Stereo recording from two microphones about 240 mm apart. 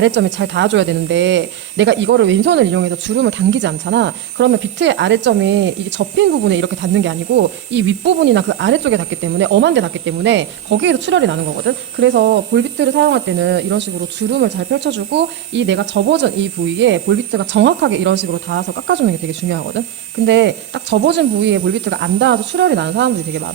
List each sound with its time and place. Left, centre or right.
0.0 s a woman's voice: right